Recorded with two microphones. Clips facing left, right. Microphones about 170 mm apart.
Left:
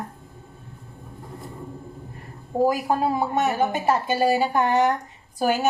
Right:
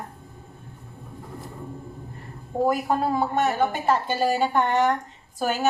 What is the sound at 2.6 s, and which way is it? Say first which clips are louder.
A woman's voice: left 1 dB; 10° left (ahead or behind).